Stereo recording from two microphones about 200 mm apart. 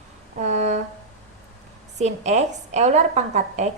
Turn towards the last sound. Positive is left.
turn(degrees=-35)  # may be behind; listen again after turning